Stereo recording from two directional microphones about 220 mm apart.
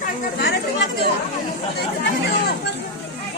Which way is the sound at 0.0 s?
50° left (ahead or behind).